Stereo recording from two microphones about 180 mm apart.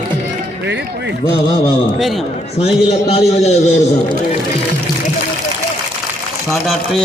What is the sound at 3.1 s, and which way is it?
A man's voice, 35° left (ahead or behind).